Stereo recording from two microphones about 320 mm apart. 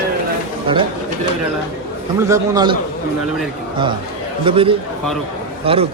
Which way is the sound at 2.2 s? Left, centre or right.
Centre.